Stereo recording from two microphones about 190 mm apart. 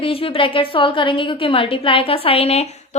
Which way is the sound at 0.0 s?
30° left (ahead or behind).